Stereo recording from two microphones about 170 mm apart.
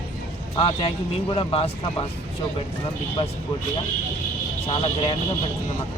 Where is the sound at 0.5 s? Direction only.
35° left (ahead or behind).